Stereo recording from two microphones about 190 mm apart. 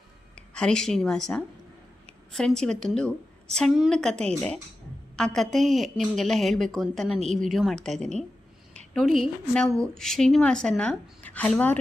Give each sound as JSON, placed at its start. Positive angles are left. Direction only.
{"t": 0.5, "sound": "a woman's voice", "side_deg": 5}